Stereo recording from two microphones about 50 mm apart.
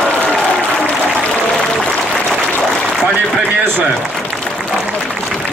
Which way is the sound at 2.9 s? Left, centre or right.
Centre.